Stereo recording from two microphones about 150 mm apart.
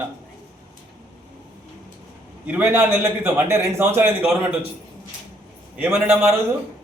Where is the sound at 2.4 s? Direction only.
10° right (ahead or behind).